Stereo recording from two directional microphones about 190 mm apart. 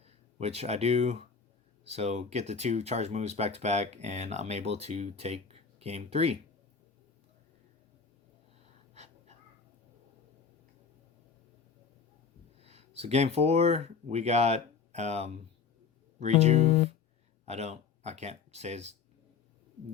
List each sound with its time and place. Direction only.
0.0 s speech: 35° right (ahead or behind)
12.6 s speech: 35° right (ahead or behind)